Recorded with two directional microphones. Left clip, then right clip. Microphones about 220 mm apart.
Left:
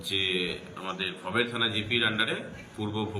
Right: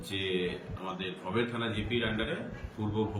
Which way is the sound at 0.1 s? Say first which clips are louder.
Left 5 dB; 10° right (ahead or behind).